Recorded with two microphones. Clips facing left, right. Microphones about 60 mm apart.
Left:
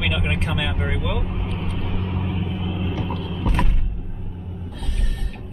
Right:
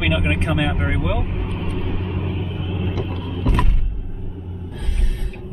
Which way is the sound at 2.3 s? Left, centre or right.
Left.